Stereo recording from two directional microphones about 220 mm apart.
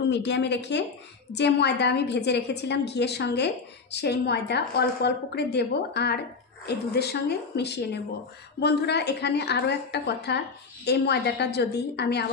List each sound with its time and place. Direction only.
0.1 s a woman's voice: 50° left (ahead or behind)